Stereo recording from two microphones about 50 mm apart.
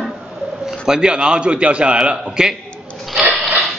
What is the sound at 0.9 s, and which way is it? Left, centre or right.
A man's voice, centre.